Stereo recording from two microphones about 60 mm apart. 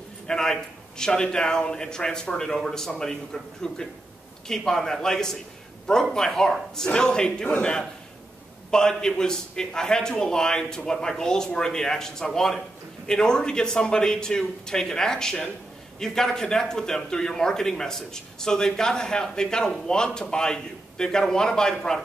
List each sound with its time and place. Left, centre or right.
0.3 s a man's voice: centre
8.6 s a man's voice: centre